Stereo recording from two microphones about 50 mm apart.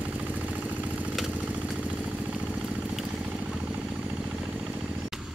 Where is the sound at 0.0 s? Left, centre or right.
Right.